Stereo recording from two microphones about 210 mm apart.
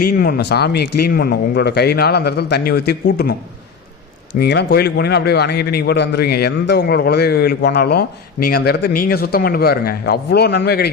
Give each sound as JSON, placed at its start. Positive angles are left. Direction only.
{"t": 0.0, "sound": "a man's voice", "side_deg": 50}
{"t": 4.4, "sound": "a man's voice", "side_deg": 50}